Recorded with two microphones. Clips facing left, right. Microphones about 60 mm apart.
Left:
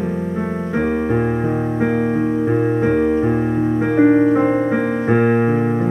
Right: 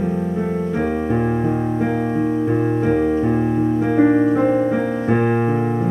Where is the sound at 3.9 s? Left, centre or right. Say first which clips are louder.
Left 3 dB; centre.